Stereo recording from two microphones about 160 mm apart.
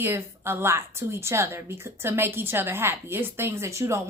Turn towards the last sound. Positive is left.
turn(degrees=-15)  # may be behind; listen again after turning